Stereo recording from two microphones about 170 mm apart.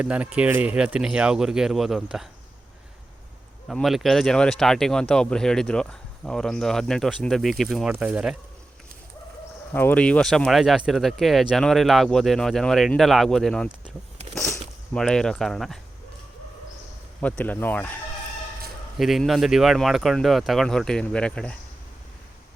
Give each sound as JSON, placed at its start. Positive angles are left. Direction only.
{"t": 0.0, "sound": "speech", "side_deg": -5}
{"t": 3.7, "sound": "speech", "side_deg": 0}
{"t": 9.7, "sound": "speech", "side_deg": 10}
{"t": 14.9, "sound": "speech", "side_deg": 5}
{"t": 17.2, "sound": "speech", "side_deg": 10}
{"t": 18.9, "sound": "speech", "side_deg": 0}